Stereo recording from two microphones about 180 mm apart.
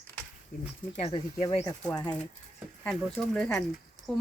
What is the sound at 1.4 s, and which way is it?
Speech, 25° left (ahead or behind).